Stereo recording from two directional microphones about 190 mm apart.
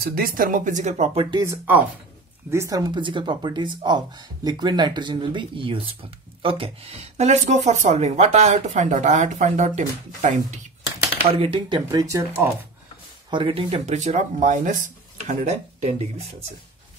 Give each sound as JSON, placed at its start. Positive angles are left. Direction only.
{"t": 0.0, "sound": "speech", "side_deg": -50}
{"t": 1.2, "sound": "speech", "side_deg": -20}
{"t": 13.3, "sound": "speech", "side_deg": -25}